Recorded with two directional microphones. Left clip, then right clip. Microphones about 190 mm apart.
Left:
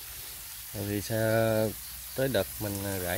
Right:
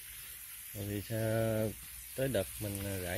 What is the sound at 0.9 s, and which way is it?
Speech, 5° left (ahead or behind).